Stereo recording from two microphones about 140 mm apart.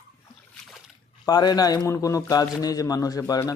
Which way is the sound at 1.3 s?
30° left (ahead or behind).